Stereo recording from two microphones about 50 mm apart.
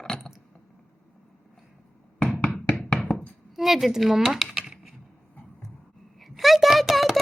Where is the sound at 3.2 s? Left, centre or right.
Centre.